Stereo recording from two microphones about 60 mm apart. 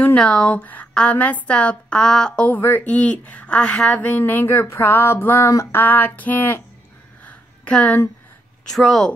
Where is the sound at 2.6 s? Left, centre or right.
Left.